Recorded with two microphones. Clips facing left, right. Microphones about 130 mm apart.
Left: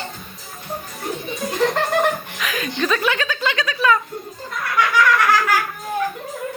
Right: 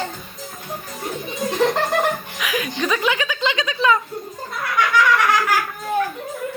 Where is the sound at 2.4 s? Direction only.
10° right (ahead or behind).